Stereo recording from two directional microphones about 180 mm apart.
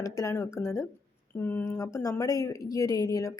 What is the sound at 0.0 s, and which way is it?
A woman's voice, 20° left (ahead or behind).